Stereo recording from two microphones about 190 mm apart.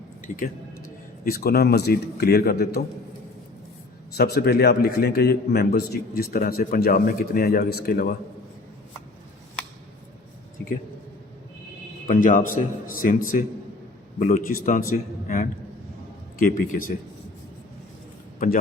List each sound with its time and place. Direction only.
0.3 s a man's voice: 50° left (ahead or behind)
4.1 s a man's voice: 55° left (ahead or behind)
12.0 s a man's voice: 45° left (ahead or behind)